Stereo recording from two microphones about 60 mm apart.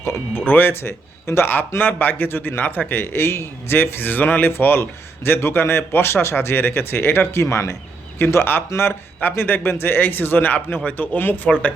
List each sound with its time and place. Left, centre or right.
0.0 s speech: left
0.4 s a man's voice: left
8.2 s a man's voice: left